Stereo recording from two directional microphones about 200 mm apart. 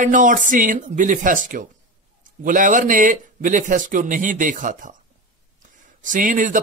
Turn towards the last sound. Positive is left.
turn(degrees=-40)  # may be behind; listen again after turning